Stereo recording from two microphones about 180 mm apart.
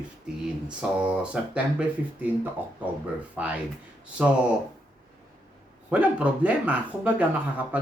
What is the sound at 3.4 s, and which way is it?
Speech, 5° right (ahead or behind).